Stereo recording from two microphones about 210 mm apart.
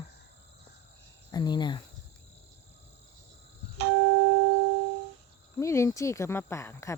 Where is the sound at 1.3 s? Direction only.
20° left (ahead or behind).